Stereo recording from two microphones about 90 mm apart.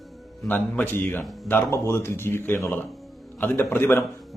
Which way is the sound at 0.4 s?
20° left (ahead or behind).